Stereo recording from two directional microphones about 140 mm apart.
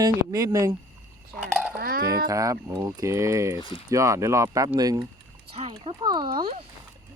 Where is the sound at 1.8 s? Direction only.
90° right.